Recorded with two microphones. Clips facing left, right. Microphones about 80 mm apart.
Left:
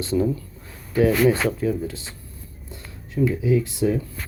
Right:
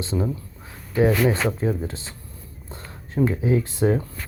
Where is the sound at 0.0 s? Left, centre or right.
Right.